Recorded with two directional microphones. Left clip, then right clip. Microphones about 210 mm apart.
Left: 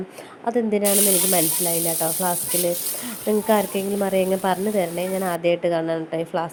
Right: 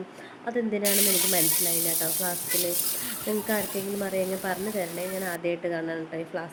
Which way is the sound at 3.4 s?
30° left (ahead or behind).